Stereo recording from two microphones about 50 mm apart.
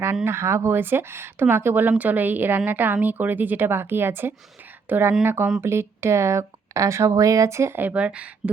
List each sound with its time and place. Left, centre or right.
0.3 s speech: right
1.9 s speech: right
3.7 s speech: right
4.9 s speech: right
5.2 s speech: right
7.8 s speech: right